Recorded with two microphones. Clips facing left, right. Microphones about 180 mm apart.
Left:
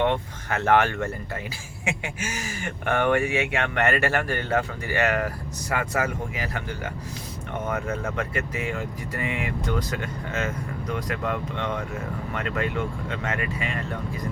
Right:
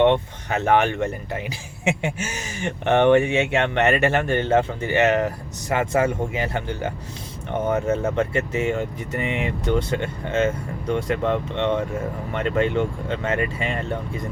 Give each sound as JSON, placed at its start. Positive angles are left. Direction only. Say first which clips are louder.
{"t": 0.0, "sound": "speech", "louder": "right 6 dB", "side_deg": -20}